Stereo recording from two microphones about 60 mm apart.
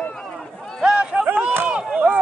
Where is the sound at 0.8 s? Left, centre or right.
Centre.